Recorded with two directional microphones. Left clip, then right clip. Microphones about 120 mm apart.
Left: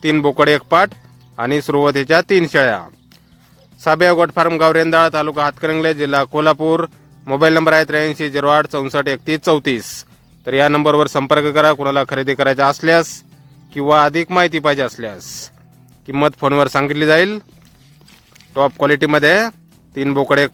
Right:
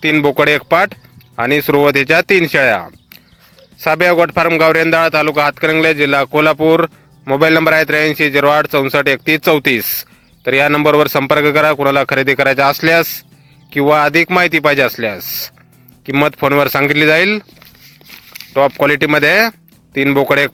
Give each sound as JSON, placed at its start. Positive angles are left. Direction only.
{"t": 0.0, "sound": "speech", "side_deg": -20}
{"t": 18.5, "sound": "speech", "side_deg": -25}